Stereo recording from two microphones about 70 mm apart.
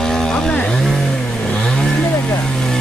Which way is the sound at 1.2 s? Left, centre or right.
Centre.